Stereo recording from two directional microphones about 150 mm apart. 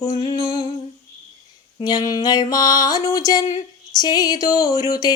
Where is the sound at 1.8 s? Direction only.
25° left (ahead or behind).